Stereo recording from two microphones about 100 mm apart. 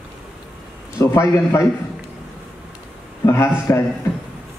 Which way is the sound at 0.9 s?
30° left (ahead or behind).